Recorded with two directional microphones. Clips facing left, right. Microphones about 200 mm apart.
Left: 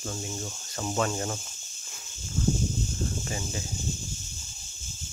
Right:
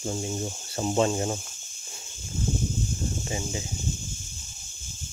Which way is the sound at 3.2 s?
15° right (ahead or behind).